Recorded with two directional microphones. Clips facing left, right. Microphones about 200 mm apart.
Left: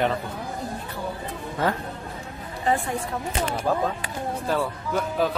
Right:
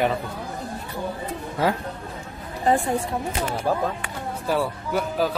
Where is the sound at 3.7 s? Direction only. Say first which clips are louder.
Right 1 dB; 10° right (ahead or behind).